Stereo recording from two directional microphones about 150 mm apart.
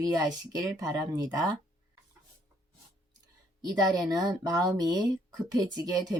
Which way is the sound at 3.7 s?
25° right (ahead or behind).